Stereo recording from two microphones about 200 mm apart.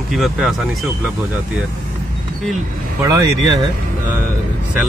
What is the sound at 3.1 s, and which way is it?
Speech, 15° right (ahead or behind).